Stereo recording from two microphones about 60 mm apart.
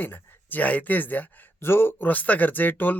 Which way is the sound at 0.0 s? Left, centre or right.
Left.